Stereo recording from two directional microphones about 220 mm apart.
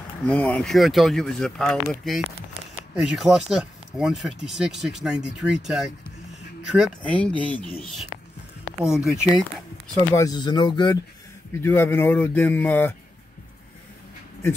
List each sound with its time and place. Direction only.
0.3 s speech: 5° left (ahead or behind)
2.2 s speech: 25° right (ahead or behind)
3.0 s speech: centre (ahead or behind)
10.1 s speech: 15° left (ahead or behind)